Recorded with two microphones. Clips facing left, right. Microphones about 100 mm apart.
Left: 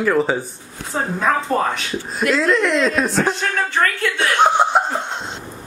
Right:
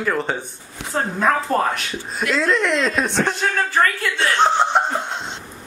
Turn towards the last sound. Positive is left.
turn(degrees=0)  # may be behind; listen again after turning